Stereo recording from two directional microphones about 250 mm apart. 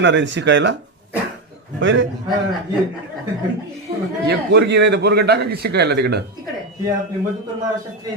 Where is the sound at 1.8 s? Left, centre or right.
Right.